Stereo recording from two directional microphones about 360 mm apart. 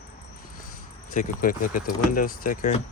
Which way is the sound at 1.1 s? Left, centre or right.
Left.